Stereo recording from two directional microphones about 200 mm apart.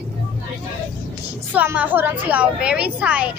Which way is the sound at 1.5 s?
10° right (ahead or behind).